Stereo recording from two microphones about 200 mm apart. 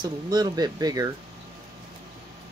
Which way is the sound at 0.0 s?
20° right (ahead or behind).